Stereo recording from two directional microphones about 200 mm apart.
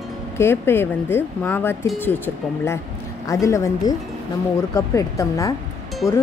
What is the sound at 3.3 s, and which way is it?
Speech, 15° left (ahead or behind).